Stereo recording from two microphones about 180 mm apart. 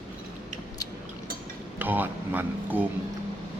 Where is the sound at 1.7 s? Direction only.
10° right (ahead or behind).